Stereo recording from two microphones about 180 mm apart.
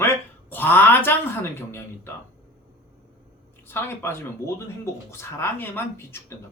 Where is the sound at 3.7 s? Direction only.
10° left (ahead or behind).